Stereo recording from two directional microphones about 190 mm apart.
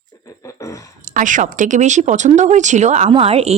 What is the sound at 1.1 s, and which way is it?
A woman's voice, 45° right (ahead or behind).